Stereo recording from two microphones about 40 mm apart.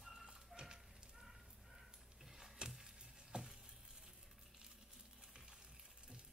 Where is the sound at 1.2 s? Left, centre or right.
Centre.